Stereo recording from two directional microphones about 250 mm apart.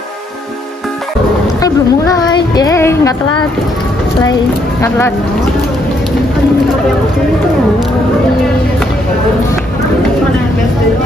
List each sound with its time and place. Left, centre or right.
1.6 s speech: centre
4.8 s speech: centre